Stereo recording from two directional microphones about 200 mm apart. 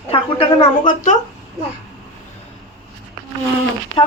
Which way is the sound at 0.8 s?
40° left (ahead or behind).